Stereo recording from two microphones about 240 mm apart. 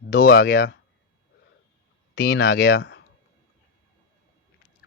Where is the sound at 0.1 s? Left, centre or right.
Left.